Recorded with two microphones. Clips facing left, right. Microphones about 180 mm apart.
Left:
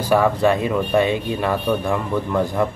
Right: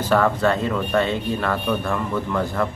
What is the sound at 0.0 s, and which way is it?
Speech, 10° left (ahead or behind).